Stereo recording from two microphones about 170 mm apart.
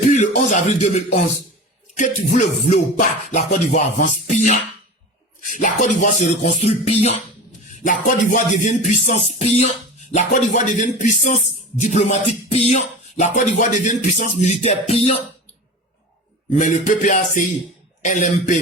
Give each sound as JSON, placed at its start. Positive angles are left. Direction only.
{"t": 0.1, "sound": "music", "side_deg": 45}
{"t": 7.9, "sound": "music", "side_deg": 50}
{"t": 16.6, "sound": "music", "side_deg": 50}